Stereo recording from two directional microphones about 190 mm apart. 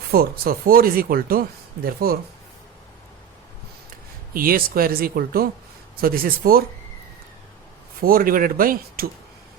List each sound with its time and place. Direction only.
0.1 s speech: 55° right (ahead or behind)
4.4 s speech: 50° right (ahead or behind)
8.0 s speech: 50° right (ahead or behind)